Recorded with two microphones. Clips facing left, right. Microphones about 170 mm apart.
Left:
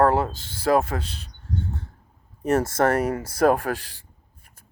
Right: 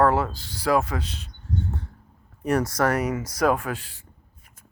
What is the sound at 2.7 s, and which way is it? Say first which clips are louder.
Speech: left 2 dB; 25° left (ahead or behind).